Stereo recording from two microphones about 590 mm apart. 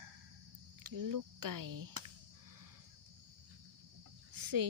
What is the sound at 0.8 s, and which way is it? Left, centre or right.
Speech, right.